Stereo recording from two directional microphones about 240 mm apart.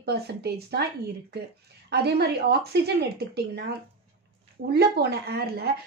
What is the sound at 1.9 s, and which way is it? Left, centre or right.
A woman's voice, right.